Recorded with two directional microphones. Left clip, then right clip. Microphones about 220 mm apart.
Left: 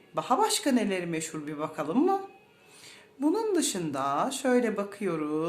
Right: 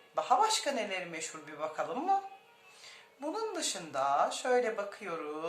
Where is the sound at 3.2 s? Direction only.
35° left (ahead or behind).